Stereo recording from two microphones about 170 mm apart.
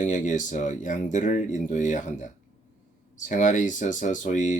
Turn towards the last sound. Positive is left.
turn(degrees=50)  # may be behind; listen again after turning